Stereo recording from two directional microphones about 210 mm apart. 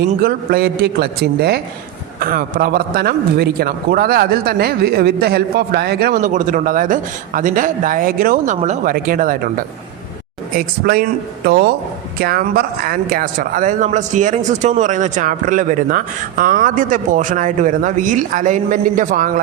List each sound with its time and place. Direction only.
0.1 s a man's voice: 45° right (ahead or behind)
10.8 s a man's voice: 45° right (ahead or behind)